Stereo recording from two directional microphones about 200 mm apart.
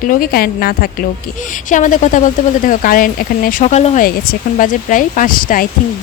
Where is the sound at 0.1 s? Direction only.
45° left (ahead or behind).